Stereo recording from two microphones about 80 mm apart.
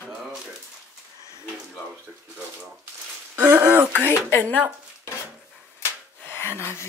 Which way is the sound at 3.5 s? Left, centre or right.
Right.